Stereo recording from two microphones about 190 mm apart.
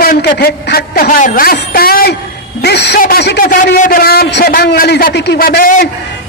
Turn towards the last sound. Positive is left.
turn(degrees=50)  # may be behind; listen again after turning